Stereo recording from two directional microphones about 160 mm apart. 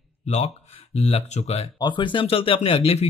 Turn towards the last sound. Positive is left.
turn(degrees=35)  # may be behind; listen again after turning